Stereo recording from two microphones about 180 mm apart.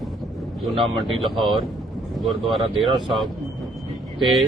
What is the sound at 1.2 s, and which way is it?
Speech, centre (ahead or behind).